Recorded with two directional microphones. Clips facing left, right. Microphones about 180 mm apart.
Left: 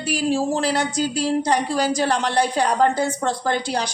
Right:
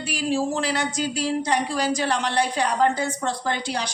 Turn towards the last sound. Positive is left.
turn(degrees=40)  # may be behind; listen again after turning